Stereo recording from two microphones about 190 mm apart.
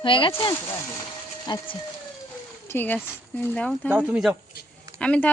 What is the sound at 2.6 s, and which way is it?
Speech, 10° left (ahead or behind).